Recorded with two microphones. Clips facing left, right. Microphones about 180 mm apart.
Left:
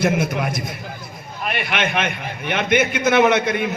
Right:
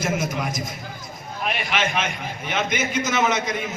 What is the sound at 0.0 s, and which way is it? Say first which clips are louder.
A man's voice: left 5 dB; 60° left (ahead or behind).